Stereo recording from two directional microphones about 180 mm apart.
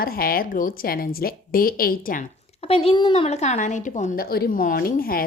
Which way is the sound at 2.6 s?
30° left (ahead or behind).